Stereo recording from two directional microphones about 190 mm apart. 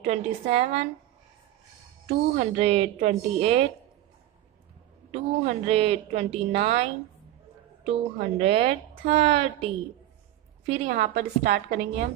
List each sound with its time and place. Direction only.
0.0 s a woman's voice: 35° right (ahead or behind)
2.0 s a woman's voice: 35° right (ahead or behind)
5.1 s a woman's voice: 35° right (ahead or behind)
10.9 s a woman's voice: 50° right (ahead or behind)